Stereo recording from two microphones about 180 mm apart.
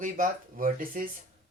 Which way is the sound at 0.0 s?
50° right (ahead or behind).